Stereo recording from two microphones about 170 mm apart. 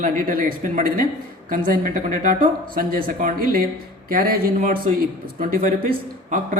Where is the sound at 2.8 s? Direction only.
60° right (ahead or behind).